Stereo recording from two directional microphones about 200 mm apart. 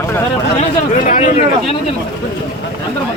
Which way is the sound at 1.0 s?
40° left (ahead or behind).